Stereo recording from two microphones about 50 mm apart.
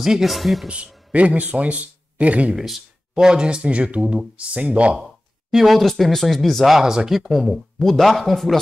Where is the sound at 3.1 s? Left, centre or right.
Centre.